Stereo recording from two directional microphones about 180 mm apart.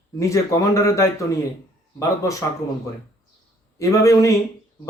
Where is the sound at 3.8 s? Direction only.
15° left (ahead or behind).